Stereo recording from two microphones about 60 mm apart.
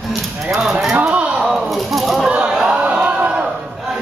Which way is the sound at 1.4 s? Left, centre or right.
Centre.